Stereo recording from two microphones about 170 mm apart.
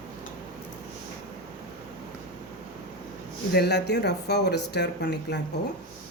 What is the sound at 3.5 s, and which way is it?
Speech, 75° left (ahead or behind).